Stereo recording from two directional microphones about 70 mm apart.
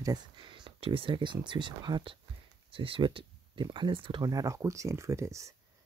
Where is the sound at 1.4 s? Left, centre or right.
Right.